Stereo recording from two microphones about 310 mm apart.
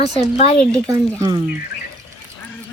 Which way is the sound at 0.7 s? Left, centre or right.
Centre.